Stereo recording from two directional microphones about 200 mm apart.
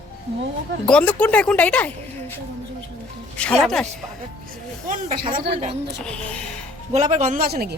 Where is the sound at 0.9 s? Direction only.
5° left (ahead or behind).